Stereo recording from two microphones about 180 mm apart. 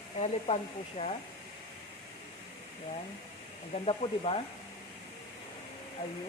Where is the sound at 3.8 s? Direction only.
30° left (ahead or behind).